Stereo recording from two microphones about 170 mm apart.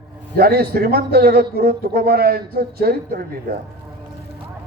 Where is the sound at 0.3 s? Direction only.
65° right (ahead or behind).